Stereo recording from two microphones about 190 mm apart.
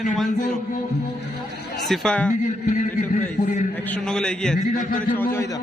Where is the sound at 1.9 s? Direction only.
5° left (ahead or behind).